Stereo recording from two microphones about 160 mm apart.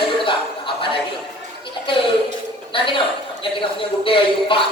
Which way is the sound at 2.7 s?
30° left (ahead or behind).